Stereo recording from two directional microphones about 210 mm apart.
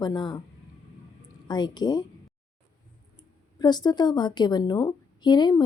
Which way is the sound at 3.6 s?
20° left (ahead or behind).